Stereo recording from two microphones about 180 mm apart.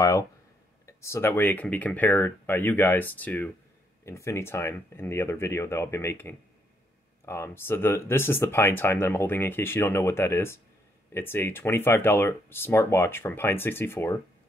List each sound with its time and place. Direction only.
0.0 s speech: 15° left (ahead or behind)